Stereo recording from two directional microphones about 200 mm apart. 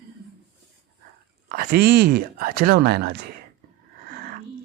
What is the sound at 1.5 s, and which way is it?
Speech, 50° right (ahead or behind).